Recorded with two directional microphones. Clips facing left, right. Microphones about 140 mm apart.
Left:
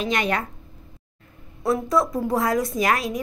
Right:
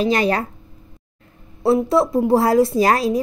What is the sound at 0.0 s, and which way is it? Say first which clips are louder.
Speech: right 6 dB; 35° right (ahead or behind).